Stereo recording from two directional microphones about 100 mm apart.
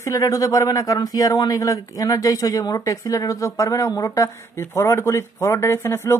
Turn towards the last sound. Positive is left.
turn(degrees=25)  # may be behind; listen again after turning